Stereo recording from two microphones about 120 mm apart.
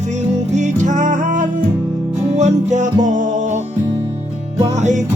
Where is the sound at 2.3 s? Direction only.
75° right (ahead or behind).